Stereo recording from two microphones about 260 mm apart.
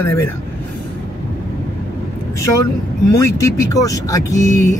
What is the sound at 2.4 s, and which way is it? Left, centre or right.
Speech, left.